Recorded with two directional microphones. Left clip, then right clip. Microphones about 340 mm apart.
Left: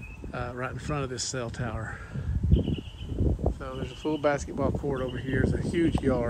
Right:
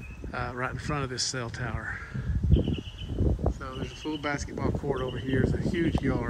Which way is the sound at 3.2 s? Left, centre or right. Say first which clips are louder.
Even; centre.